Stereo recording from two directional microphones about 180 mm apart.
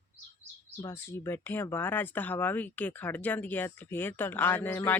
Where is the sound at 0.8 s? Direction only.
15° left (ahead or behind).